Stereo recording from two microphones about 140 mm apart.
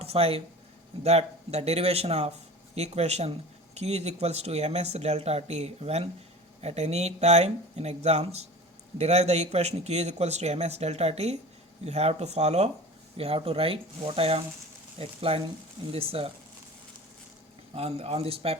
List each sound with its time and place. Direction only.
0.0 s speech: 45° right (ahead or behind)
17.7 s speech: 45° right (ahead or behind)